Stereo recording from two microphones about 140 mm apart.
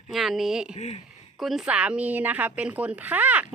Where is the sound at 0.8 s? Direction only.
50° left (ahead or behind).